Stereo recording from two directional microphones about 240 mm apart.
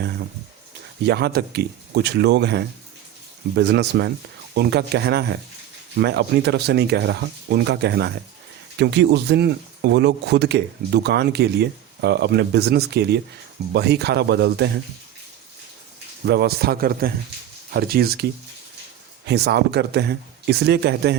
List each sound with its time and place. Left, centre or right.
1.0 s speech: right
16.2 s a man's voice: right
19.3 s speech: right